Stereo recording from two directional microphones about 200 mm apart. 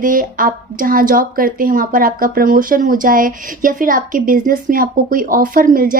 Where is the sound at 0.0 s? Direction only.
45° right (ahead or behind).